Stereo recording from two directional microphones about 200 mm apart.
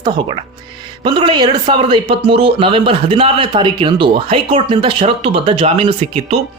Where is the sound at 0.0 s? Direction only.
25° right (ahead or behind).